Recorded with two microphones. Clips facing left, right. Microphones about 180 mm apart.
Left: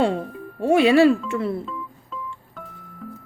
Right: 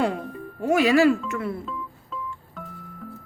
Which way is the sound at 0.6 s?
30° left (ahead or behind).